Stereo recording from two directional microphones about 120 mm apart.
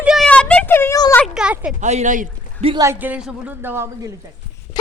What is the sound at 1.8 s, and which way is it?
Speech, 75° right (ahead or behind).